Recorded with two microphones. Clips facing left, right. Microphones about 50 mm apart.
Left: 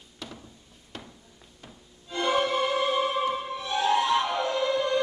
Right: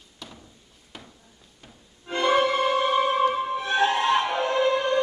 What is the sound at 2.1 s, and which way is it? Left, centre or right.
Music, right.